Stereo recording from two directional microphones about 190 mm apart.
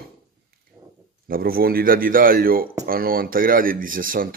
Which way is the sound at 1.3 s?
50° right (ahead or behind).